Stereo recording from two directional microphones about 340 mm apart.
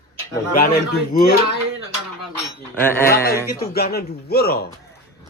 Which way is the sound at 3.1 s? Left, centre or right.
Left.